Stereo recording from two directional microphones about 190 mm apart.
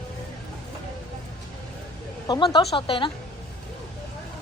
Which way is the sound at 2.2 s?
20° left (ahead or behind).